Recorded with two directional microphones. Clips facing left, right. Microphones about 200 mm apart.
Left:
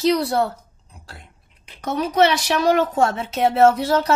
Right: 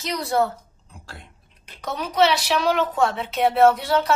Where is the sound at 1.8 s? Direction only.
50° left (ahead or behind).